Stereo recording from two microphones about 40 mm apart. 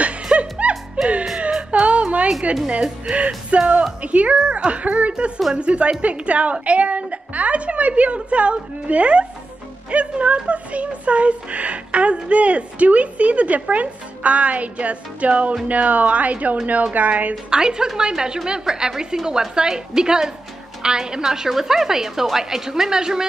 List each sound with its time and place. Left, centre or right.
0.0 s music: right
2.8 s speech: right
17.5 s a woman's voice: centre